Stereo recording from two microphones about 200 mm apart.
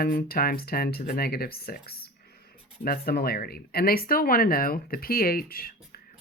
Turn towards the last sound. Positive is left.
turn(degrees=45)  # may be behind; listen again after turning